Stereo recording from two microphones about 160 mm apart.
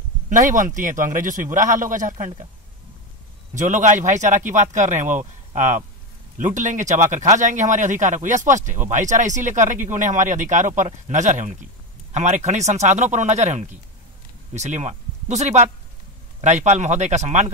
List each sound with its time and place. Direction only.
0.3 s speech: 50° right (ahead or behind)
3.5 s speech: 50° right (ahead or behind)